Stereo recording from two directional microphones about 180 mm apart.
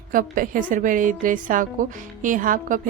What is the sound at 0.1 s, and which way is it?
A woman's voice, 50° right (ahead or behind).